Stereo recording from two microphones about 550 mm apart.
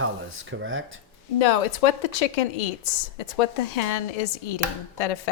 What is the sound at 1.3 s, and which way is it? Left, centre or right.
Speech, left.